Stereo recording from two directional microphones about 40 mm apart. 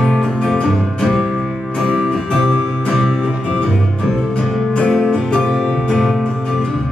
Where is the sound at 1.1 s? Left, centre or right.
Centre.